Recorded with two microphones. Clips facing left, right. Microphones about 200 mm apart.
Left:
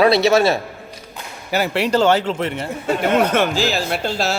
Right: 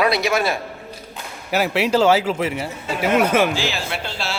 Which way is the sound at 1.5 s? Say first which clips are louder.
Even; centre (ahead or behind).